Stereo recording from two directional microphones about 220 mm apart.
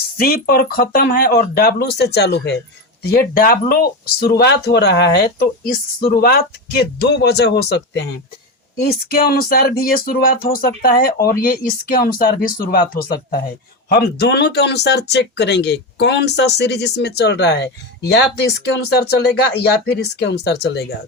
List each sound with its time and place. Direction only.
0.2 s speech: 45° left (ahead or behind)